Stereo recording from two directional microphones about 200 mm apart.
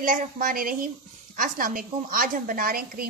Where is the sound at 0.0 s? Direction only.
40° right (ahead or behind).